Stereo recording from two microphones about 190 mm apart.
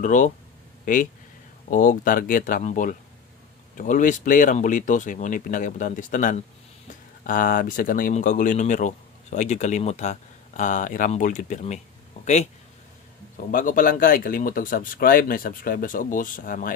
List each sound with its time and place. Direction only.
0.0 s speech: 40° left (ahead or behind)
1.7 s speech: 45° left (ahead or behind)
13.5 s speech: 45° left (ahead or behind)